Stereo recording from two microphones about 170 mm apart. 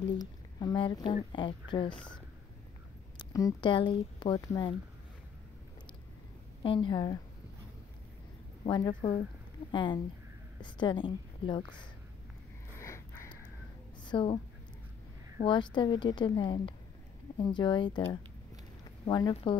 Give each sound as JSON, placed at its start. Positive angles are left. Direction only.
{"t": 0.0, "sound": "speech", "side_deg": 25}
{"t": 3.2, "sound": "speech", "side_deg": 25}
{"t": 6.6, "sound": "speech", "side_deg": 30}
{"t": 8.6, "sound": "a woman's voice", "side_deg": 25}
{"t": 12.7, "sound": "sniff", "side_deg": 15}
{"t": 14.0, "sound": "a woman's voice", "side_deg": 30}
{"t": 15.4, "sound": "speech", "side_deg": 30}
{"t": 19.0, "sound": "speech", "side_deg": 25}